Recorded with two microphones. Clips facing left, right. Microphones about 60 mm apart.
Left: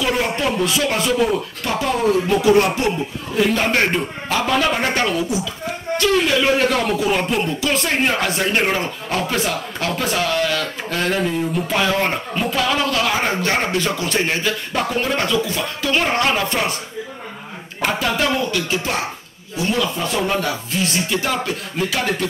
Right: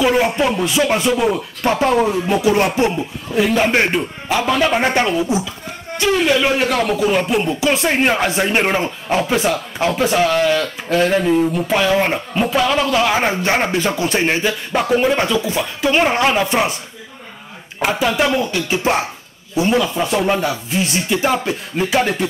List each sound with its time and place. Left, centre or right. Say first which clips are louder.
0.0 s speech: right 5 dB; centre
1.6 s speech: right 8 dB; right
3.4 s speech: right 2 dB; centre
4.7 s speech: right 3 dB; centre
5.9 s speech: right 2 dB; centre
7.6 s speech: right 4 dB; centre
17.7 s speech: right 3 dB; centre
18.5 s speech: right 4 dB; right